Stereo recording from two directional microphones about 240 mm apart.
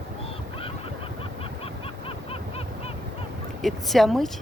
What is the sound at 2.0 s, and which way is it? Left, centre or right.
Honk, left.